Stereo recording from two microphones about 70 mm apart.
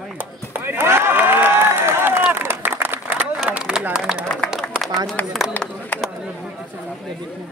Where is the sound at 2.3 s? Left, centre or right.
Right.